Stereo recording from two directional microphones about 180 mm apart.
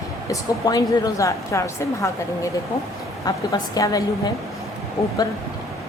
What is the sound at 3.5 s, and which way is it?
Speech, 20° left (ahead or behind).